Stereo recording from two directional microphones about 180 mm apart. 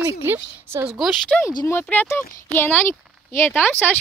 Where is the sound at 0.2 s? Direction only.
15° right (ahead or behind).